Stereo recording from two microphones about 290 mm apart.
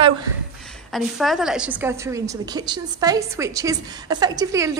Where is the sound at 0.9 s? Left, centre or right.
Centre.